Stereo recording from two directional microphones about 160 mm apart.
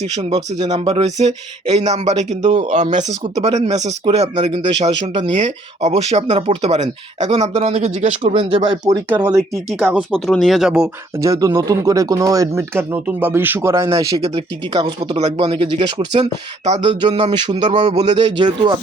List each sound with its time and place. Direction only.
0.7 s speech: 40° right (ahead or behind)
8.3 s speech: 35° right (ahead or behind)
9.2 s speech: 10° right (ahead or behind)
11.2 s speech: 20° right (ahead or behind)
14.2 s speech: 30° right (ahead or behind)
16.6 s speech: 45° right (ahead or behind)
16.9 s speech: 30° right (ahead or behind)
17.7 s speech: 45° right (ahead or behind)
18.3 s speech: 30° right (ahead or behind)